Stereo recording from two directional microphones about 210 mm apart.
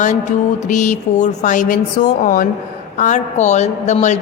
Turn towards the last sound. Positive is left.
turn(degrees=35)  # may be behind; listen again after turning